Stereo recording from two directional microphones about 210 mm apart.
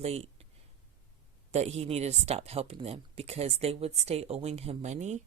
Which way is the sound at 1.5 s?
30° right (ahead or behind).